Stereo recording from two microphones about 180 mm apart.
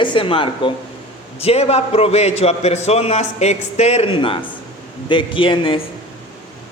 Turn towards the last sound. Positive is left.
turn(degrees=30)  # may be behind; listen again after turning